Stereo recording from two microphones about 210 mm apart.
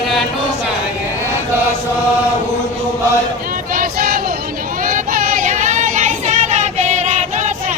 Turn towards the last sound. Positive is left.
turn(degrees=-35)  # may be behind; listen again after turning